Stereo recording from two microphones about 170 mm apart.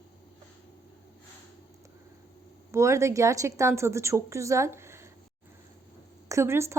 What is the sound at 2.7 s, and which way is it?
A woman's voice, 15° right (ahead or behind).